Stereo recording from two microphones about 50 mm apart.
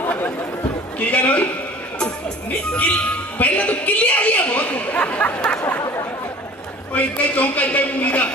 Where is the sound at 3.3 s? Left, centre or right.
Left.